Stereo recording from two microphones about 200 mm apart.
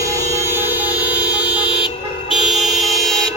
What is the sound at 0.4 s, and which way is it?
Vehicle horn, 10° right (ahead or behind).